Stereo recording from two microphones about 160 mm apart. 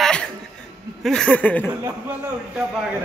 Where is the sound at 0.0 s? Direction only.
5° left (ahead or behind).